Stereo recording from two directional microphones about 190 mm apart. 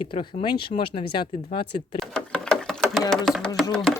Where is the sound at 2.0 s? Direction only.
5° left (ahead or behind).